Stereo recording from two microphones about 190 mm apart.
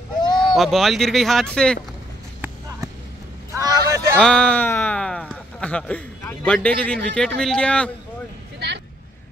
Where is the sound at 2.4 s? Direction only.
15° right (ahead or behind).